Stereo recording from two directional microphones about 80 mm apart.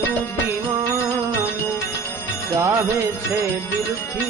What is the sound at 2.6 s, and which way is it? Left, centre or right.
Music, right.